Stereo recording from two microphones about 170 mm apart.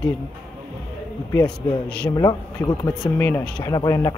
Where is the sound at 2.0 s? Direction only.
25° left (ahead or behind).